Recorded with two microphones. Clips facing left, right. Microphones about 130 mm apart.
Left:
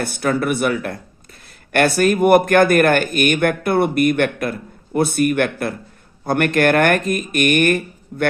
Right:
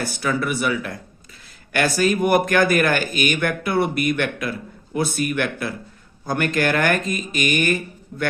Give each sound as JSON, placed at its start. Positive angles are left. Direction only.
{"t": 0.0, "sound": "speech", "side_deg": 55}